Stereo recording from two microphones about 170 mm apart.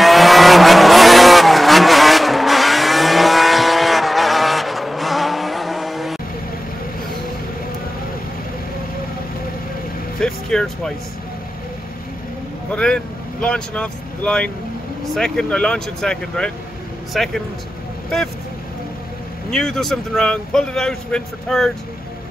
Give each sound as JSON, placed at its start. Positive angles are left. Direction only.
{"t": 0.0, "sound": "vehicle", "side_deg": 0}
{"t": 10.2, "sound": "vehicle", "side_deg": 5}
{"t": 12.7, "sound": "vehicle", "side_deg": 5}
{"t": 15.1, "sound": "speech", "side_deg": 5}
{"t": 19.5, "sound": "speech", "side_deg": 5}